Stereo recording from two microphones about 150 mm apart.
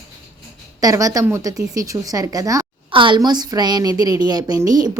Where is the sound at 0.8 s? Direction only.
25° right (ahead or behind).